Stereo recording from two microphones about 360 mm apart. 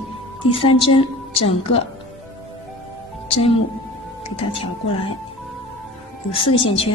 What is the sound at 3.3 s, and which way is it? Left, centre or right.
Speech, centre.